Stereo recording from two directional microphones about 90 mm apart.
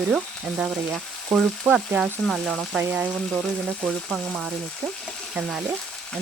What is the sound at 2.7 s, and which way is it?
Speech, 15° right (ahead or behind).